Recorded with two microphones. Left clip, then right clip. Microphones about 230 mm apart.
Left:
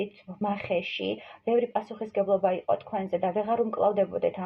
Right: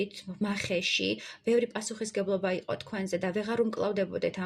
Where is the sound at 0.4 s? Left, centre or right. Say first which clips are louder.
Left 2 dB; right.